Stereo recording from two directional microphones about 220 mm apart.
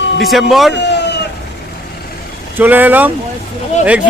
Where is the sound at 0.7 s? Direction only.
50° left (ahead or behind).